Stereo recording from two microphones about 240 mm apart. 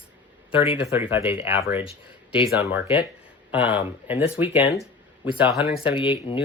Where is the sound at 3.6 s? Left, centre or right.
Centre.